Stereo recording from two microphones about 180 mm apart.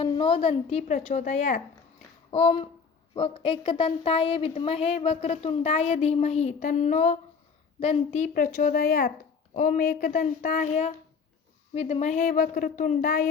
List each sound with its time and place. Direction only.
0.0 s a woman's voice: 25° left (ahead or behind); by 10.1 s 55° left (ahead or behind)
10.1 s a woman's voice: 45° left (ahead or behind)
12.3 s a woman's voice: 50° left (ahead or behind)